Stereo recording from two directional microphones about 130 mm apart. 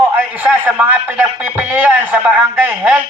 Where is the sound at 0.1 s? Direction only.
15° right (ahead or behind).